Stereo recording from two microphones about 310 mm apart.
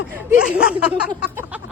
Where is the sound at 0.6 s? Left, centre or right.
Centre.